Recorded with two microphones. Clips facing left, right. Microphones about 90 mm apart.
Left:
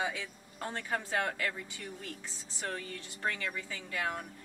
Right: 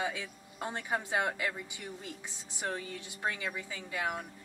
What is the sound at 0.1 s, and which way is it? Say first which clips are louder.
Speech: even; 15° right (ahead or behind).